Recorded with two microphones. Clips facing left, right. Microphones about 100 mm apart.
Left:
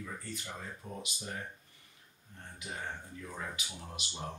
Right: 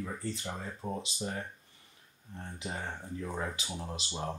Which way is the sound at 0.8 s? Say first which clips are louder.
Right 11 dB; 55° right (ahead or behind).